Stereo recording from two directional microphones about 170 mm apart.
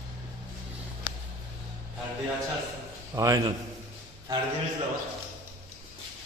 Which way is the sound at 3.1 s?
20° right (ahead or behind).